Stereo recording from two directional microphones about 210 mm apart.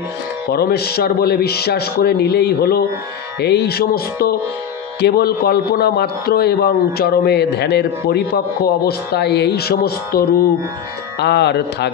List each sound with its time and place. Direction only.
0.5 s a man's voice: 50° left (ahead or behind)